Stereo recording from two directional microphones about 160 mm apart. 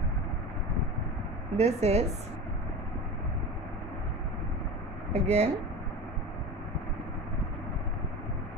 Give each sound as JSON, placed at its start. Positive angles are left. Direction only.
{"t": 1.6, "sound": "a woman's voice", "side_deg": -45}
{"t": 5.1, "sound": "speech", "side_deg": -40}